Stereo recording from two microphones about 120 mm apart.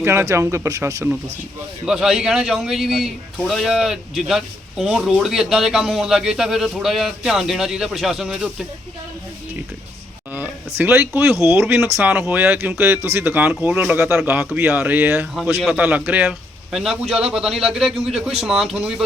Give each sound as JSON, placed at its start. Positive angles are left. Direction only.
{"t": 0.0, "sound": "speech", "side_deg": -20}
{"t": 1.9, "sound": "a man's voice", "side_deg": -5}
{"t": 10.8, "sound": "speech", "side_deg": -20}
{"t": 16.7, "sound": "a man's voice", "side_deg": 0}